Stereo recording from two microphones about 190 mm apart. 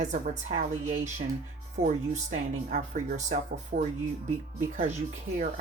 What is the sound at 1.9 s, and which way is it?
Speech, 40° right (ahead or behind).